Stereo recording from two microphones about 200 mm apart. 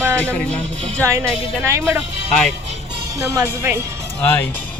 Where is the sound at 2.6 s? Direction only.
30° right (ahead or behind).